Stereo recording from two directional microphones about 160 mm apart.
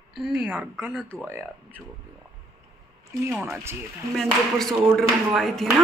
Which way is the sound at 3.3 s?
15° right (ahead or behind).